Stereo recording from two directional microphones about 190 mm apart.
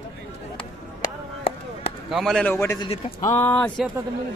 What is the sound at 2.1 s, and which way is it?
A man's voice, centre (ahead or behind).